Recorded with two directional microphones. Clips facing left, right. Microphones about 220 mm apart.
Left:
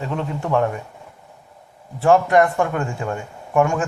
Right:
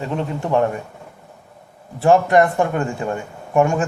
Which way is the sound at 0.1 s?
20° right (ahead or behind).